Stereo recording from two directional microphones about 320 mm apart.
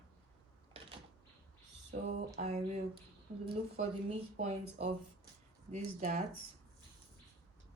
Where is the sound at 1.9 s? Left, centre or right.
Right.